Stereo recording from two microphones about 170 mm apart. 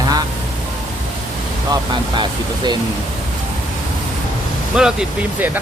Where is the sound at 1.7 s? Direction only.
25° right (ahead or behind).